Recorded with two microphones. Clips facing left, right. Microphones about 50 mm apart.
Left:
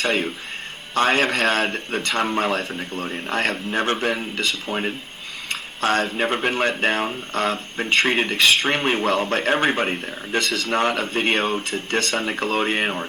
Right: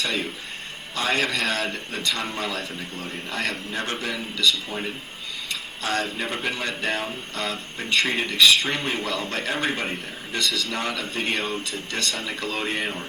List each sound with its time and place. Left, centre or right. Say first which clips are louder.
0.0 s speech: left 5 dB; left